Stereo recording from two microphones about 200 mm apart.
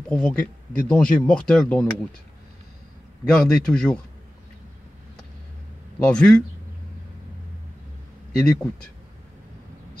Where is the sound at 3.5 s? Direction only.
5° left (ahead or behind).